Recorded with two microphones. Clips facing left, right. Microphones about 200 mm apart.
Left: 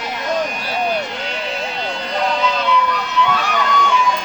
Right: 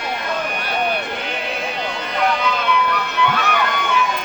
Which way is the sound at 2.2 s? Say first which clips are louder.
Even; 55° right (ahead or behind).